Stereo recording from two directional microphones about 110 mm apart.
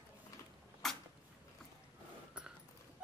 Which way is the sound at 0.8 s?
Centre (ahead or behind).